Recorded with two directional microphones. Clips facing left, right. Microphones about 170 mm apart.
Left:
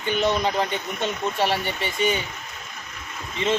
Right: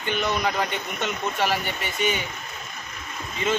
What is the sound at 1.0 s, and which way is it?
Speech, 30° left (ahead or behind).